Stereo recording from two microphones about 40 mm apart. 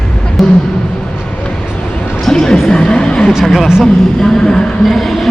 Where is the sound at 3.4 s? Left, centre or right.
Centre.